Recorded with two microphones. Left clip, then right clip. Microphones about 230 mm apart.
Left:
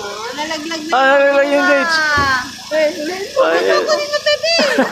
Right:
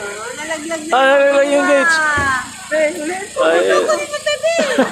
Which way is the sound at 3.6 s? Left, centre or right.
Left.